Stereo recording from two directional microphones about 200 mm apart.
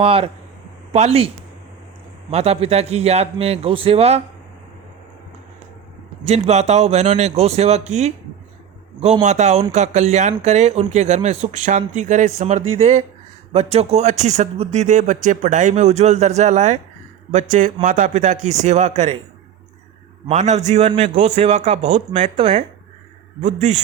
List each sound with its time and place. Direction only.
0.0 s a man's voice: 30° right (ahead or behind)
2.3 s a man's voice: 30° right (ahead or behind)
6.2 s a man's voice: 35° right (ahead or behind)
9.2 s a man's voice: 35° right (ahead or behind)
20.2 s a man's voice: 35° right (ahead or behind)